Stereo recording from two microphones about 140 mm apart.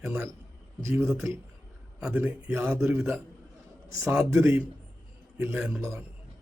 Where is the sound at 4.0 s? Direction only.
15° right (ahead or behind).